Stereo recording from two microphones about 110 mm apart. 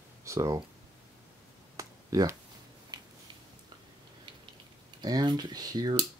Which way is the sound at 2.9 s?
40° right (ahead or behind).